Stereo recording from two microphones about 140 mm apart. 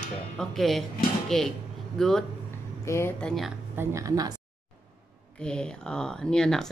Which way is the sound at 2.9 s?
20° left (ahead or behind).